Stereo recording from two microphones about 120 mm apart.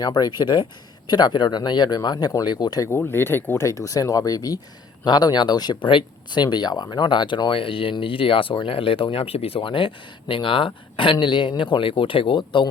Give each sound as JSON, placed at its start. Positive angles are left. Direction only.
{"t": 0.0, "sound": "speech", "side_deg": 35}
{"t": 2.9, "sound": "speech", "side_deg": 20}